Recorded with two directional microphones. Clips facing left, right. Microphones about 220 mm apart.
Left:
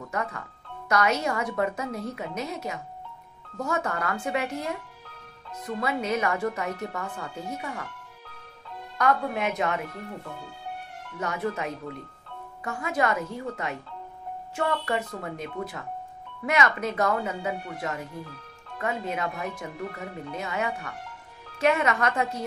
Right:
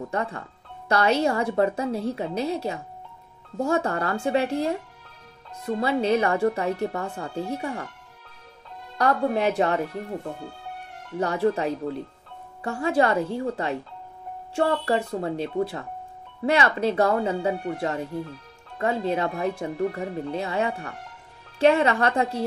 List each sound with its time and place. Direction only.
0.0 s speech: 30° right (ahead or behind)
8.9 s speech: 35° right (ahead or behind)
11.1 s speech: 30° right (ahead or behind)